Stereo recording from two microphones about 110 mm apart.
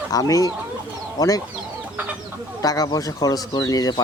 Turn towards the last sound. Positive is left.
turn(degrees=35)  # may be behind; listen again after turning